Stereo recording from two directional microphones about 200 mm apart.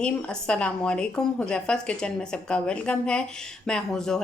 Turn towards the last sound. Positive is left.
turn(degrees=5)  # may be behind; listen again after turning